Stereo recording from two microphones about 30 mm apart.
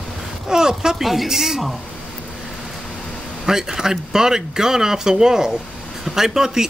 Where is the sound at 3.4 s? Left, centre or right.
Centre.